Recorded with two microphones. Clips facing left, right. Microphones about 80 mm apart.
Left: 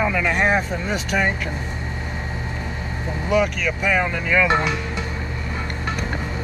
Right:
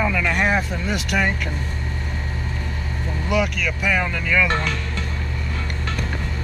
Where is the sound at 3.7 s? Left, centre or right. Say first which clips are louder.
Left 2 dB; centre.